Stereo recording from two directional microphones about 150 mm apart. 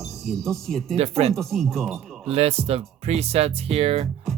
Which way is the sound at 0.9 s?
45° right (ahead or behind).